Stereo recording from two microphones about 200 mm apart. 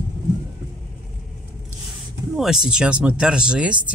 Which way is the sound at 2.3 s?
Centre (ahead or behind).